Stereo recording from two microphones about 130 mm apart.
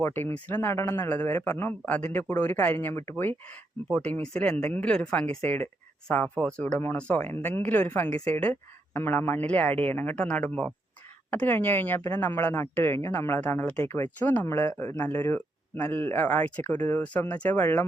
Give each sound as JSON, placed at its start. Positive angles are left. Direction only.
{"t": 0.0, "sound": "speech", "side_deg": 15}